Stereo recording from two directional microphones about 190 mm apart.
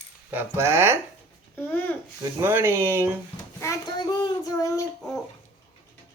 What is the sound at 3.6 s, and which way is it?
A child's voice, 20° left (ahead or behind).